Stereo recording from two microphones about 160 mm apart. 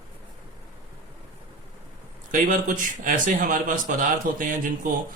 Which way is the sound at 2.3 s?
55° right (ahead or behind).